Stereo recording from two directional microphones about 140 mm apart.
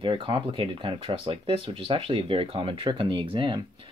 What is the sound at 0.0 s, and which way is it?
Speech, 35° right (ahead or behind).